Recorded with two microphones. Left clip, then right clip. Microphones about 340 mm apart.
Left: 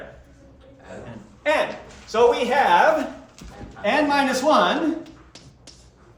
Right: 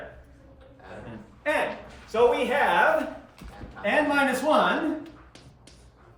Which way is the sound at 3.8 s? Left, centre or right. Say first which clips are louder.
Left 3 dB; centre.